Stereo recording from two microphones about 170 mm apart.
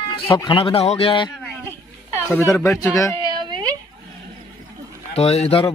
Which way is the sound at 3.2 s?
25° right (ahead or behind).